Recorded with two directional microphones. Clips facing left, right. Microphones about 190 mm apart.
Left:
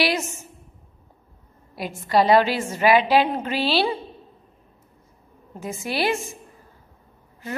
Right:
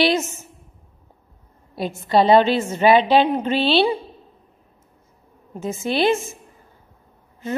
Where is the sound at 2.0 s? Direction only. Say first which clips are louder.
Right 3 dB; 25° right (ahead or behind).